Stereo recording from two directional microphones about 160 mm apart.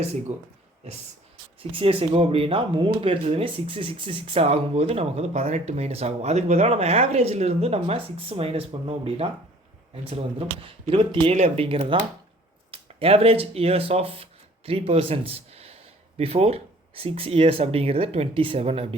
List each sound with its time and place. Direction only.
0.3 s speech: 45° right (ahead or behind)
1.7 s speech: 35° right (ahead or behind)